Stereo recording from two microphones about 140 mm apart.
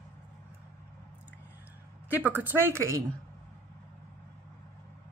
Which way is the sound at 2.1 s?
10° right (ahead or behind).